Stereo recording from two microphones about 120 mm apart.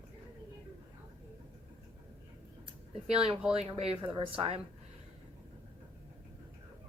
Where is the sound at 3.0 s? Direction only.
60° right (ahead or behind).